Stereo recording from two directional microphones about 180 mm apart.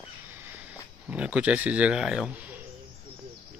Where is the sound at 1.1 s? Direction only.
5° right (ahead or behind).